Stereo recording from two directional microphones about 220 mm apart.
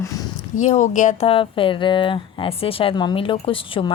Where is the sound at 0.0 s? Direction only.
15° left (ahead or behind).